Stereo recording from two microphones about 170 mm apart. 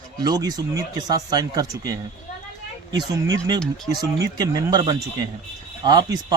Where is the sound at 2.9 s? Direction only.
25° right (ahead or behind).